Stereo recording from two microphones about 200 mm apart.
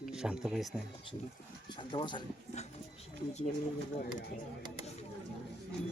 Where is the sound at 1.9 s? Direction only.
25° left (ahead or behind).